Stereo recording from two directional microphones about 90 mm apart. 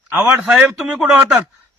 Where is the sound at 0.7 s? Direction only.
5° right (ahead or behind).